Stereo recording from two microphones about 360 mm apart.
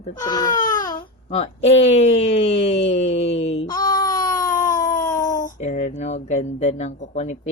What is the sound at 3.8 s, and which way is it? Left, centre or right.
Baby cry, centre.